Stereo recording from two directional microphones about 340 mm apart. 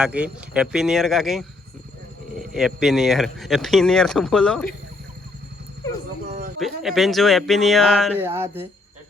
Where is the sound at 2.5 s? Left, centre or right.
Centre.